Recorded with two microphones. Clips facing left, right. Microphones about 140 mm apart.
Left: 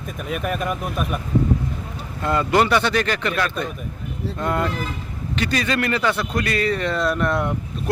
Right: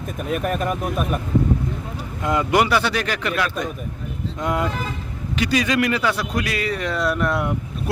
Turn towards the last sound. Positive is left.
turn(degrees=-10)  # may be behind; listen again after turning